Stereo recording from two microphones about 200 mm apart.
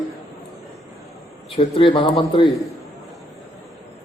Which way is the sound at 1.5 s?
25° left (ahead or behind).